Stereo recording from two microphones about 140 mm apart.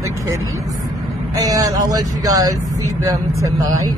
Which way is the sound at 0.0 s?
25° right (ahead or behind).